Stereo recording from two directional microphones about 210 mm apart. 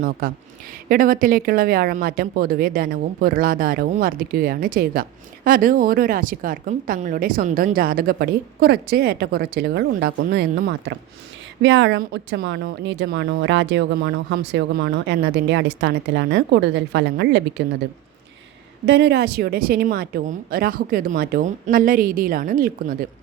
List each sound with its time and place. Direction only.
0.2 s a woman's voice: 45° right (ahead or behind)
11.6 s speech: 60° right (ahead or behind)
18.9 s a woman's voice: 50° right (ahead or behind)